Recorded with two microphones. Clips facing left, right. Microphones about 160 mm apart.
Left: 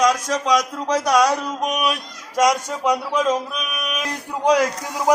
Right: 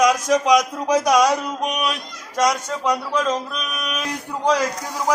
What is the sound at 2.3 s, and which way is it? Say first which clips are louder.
Speech: left 2 dB; 10° left (ahead or behind).